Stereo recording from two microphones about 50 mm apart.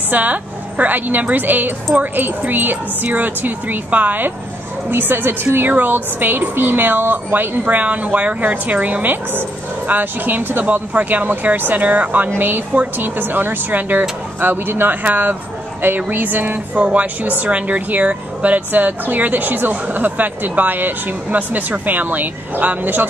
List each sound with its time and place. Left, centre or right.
0.1 s speech: right
4.9 s speech: right
9.0 s speech: right
10.6 s speech: right
16.7 s speech: right